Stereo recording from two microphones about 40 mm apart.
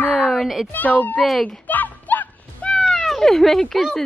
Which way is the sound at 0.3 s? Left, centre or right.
Centre.